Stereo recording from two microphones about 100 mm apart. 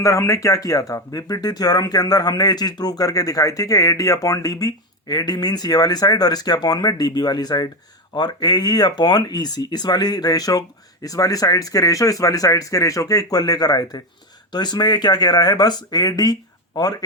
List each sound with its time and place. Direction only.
0.0 s speech: 30° left (ahead or behind)